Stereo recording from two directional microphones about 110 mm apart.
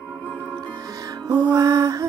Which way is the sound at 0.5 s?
35° right (ahead or behind).